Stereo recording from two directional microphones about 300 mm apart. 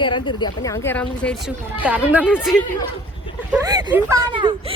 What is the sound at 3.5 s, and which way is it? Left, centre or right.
Speech, centre.